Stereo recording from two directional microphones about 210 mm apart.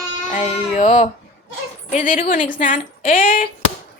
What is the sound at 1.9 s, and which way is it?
A woman's voice, 40° left (ahead or behind).